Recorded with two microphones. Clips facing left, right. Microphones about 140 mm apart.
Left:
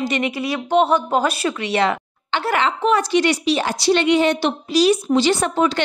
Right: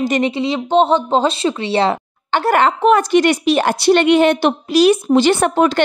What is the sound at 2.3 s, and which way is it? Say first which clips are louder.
A woman's voice: right 6 dB; 50° right (ahead or behind).